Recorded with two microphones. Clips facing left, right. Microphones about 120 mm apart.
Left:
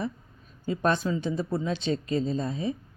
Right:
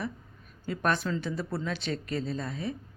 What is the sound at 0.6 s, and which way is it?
Speech, 25° left (ahead or behind).